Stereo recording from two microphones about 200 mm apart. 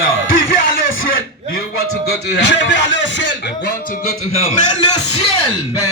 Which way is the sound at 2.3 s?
60° left (ahead or behind).